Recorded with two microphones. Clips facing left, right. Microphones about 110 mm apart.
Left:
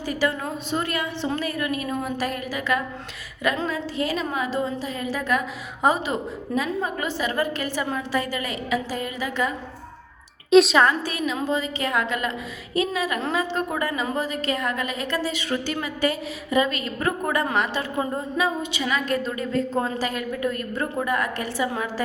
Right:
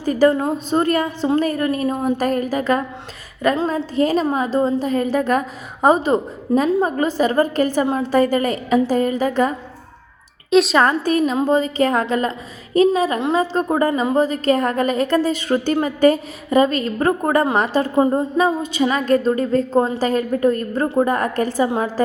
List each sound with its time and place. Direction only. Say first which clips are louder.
0.0 s a woman's voice: right 10 dB; 40° right (ahead or behind)
10.5 s a woman's voice: even; centre (ahead or behind)
10.8 s a woman's voice: right 5 dB; 45° right (ahead or behind)